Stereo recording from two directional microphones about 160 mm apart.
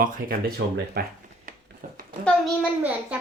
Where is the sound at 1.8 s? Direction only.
60° right (ahead or behind).